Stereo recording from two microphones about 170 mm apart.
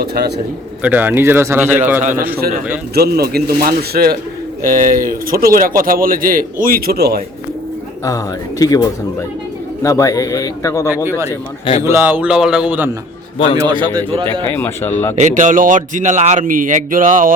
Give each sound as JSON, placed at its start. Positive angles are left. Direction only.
{"t": 0.0, "sound": "a man's voice", "side_deg": -70}
{"t": 0.8, "sound": "a man's voice", "side_deg": -10}
{"t": 2.0, "sound": "a man's voice", "side_deg": -50}
{"t": 2.9, "sound": "a man's voice", "side_deg": -65}
{"t": 4.6, "sound": "a man's voice", "side_deg": -55}
{"t": 8.0, "sound": "a man's voice", "side_deg": 20}
{"t": 11.8, "sound": "a man's voice", "side_deg": -15}
{"t": 13.6, "sound": "a man's voice", "side_deg": -30}
{"t": 14.5, "sound": "a man's voice", "side_deg": 15}
{"t": 15.2, "sound": "a man's voice", "side_deg": -50}